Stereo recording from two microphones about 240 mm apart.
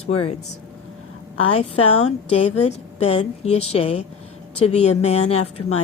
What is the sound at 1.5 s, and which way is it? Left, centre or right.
A woman's voice, left.